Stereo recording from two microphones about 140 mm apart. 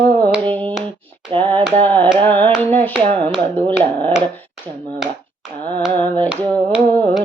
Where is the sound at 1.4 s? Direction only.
10° left (ahead or behind).